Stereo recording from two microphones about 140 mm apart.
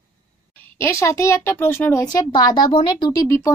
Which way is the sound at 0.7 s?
20° left (ahead or behind).